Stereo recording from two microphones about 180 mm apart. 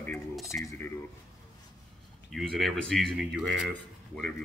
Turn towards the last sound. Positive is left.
turn(degrees=5)  # may be behind; listen again after turning